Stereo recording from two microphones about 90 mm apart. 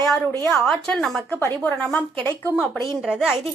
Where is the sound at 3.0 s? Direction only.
5° right (ahead or behind).